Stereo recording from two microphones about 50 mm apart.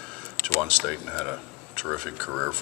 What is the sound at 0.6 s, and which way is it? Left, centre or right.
Speech, centre.